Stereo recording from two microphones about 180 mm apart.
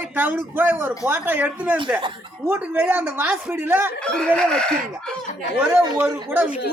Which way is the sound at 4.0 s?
5° left (ahead or behind).